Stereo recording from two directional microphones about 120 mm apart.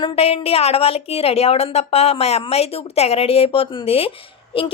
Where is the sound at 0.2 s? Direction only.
55° left (ahead or behind).